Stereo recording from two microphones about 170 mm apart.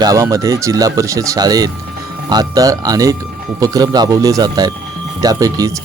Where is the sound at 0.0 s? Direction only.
20° right (ahead or behind).